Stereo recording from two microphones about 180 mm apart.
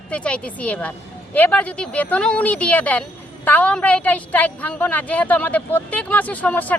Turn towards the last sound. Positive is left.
turn(degrees=10)  # may be behind; listen again after turning